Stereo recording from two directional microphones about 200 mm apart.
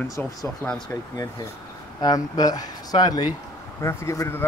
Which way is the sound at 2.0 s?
20° left (ahead or behind).